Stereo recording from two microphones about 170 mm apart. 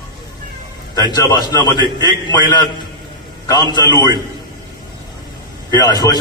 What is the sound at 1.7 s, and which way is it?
Speech, 25° right (ahead or behind).